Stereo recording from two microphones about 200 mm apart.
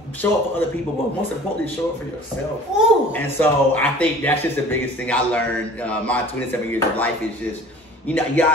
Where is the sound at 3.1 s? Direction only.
10° left (ahead or behind).